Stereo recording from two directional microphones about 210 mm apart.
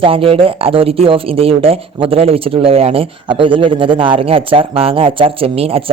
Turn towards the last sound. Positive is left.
turn(degrees=-30)  # may be behind; listen again after turning